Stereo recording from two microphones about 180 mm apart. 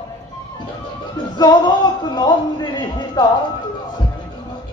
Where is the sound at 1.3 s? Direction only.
20° left (ahead or behind).